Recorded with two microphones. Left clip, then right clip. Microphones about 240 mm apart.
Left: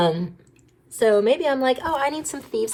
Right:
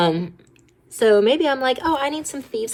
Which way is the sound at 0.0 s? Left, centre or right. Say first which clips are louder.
Right 2 dB; right.